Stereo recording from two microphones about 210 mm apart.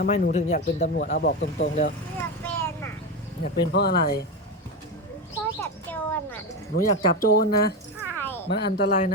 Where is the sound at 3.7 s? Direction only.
50° left (ahead or behind).